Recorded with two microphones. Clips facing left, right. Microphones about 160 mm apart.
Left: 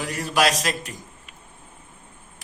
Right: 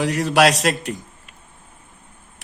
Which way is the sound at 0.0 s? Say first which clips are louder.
Right 6 dB; 80° right.